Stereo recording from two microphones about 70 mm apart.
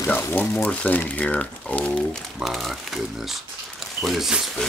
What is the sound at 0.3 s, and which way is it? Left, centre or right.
Speech, left.